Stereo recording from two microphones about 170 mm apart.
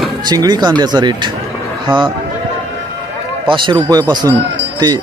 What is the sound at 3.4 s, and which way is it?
Speech, 30° right (ahead or behind).